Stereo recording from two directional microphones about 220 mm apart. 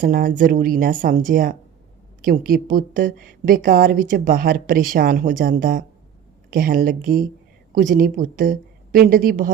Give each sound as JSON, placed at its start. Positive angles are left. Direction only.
{"t": 0.0, "sound": "a woman's voice", "side_deg": -40}